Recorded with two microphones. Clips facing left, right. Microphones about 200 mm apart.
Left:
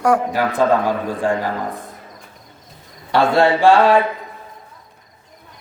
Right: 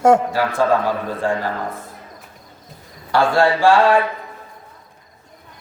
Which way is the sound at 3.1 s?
20° left (ahead or behind).